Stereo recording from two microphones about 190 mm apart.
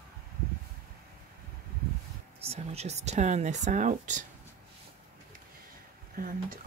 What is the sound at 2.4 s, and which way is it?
Speech, 35° right (ahead or behind).